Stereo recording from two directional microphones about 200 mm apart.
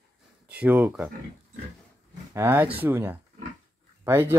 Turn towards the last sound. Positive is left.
turn(degrees=-10)  # may be behind; listen again after turning